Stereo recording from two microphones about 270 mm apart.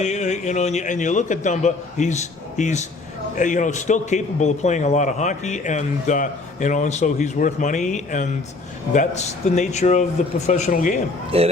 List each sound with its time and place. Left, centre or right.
0.0 s a man's voice: left
11.3 s a man's voice: right